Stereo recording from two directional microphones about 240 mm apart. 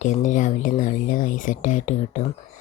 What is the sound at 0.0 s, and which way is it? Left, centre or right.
Speech, left.